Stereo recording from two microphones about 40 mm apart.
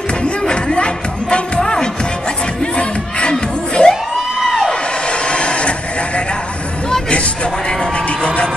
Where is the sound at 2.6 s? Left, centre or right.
Left.